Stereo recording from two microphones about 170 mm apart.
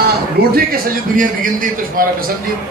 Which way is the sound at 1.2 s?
55° right (ahead or behind).